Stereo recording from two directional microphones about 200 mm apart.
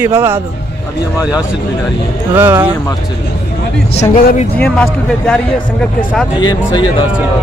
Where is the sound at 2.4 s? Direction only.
10° right (ahead or behind).